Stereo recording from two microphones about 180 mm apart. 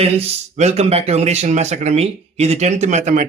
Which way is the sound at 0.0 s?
35° right (ahead or behind).